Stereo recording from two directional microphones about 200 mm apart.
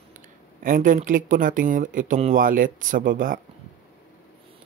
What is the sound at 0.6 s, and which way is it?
Speech, 40° right (ahead or behind).